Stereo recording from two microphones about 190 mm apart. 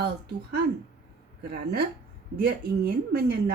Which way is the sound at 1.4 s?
55° right (ahead or behind).